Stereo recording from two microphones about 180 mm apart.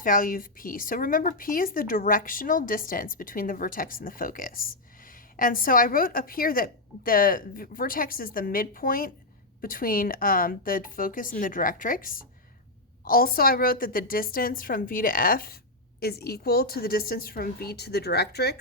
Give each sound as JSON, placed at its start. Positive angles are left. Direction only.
{"t": 0.0, "sound": "a woman's voice", "side_deg": 50}